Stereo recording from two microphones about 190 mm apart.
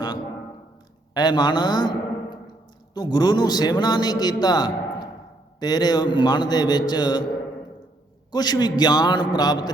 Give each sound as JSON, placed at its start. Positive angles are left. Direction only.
{"t": 1.1, "sound": "a man's voice", "side_deg": 20}
{"t": 8.3, "sound": "a man's voice", "side_deg": 20}